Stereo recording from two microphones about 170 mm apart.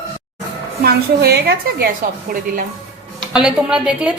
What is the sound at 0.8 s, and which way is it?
A woman's voice, 70° right (ahead or behind).